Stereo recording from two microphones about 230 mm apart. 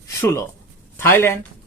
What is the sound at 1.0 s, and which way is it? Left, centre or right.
Speech, centre.